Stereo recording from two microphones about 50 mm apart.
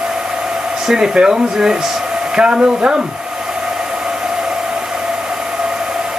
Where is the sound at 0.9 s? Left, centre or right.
Centre.